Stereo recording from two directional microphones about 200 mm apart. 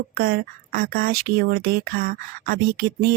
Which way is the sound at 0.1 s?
50° right (ahead or behind).